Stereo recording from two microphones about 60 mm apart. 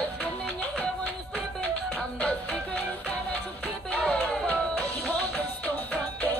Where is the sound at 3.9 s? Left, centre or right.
Left.